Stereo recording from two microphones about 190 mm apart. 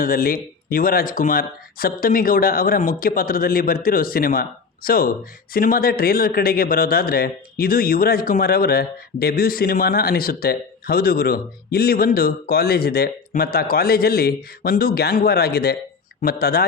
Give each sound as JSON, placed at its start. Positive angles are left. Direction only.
{"t": 0.0, "sound": "speech", "side_deg": 50}